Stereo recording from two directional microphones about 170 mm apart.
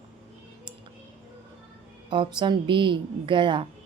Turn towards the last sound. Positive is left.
turn(degrees=-30)  # may be behind; listen again after turning